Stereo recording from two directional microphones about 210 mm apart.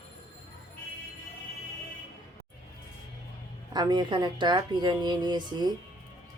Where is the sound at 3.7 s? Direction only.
20° right (ahead or behind).